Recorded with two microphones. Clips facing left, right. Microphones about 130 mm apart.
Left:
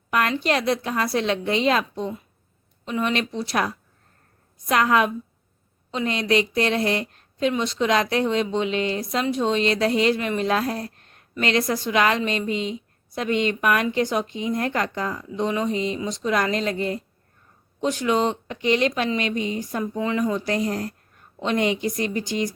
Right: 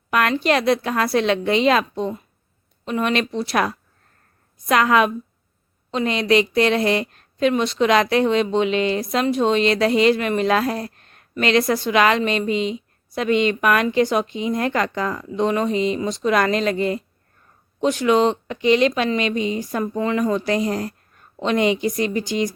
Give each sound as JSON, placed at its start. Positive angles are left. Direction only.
{"t": 0.1, "sound": "a woman's voice", "side_deg": -85}
{"t": 2.8, "sound": "speech", "side_deg": -70}
{"t": 4.7, "sound": "speech", "side_deg": -90}
{"t": 5.9, "sound": "speech", "side_deg": -80}
{"t": 7.5, "sound": "speech", "side_deg": -65}
{"t": 9.3, "sound": "speech", "side_deg": -70}
{"t": 13.9, "sound": "speech", "side_deg": -80}
{"t": 16.0, "sound": "speech", "side_deg": -70}
{"t": 17.7, "sound": "speech", "side_deg": -75}
{"t": 19.8, "sound": "a woman's voice", "side_deg": -55}